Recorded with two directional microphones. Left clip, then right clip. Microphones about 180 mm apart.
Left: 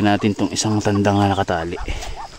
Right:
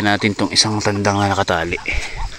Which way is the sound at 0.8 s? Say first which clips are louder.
Even; 20° left (ahead or behind).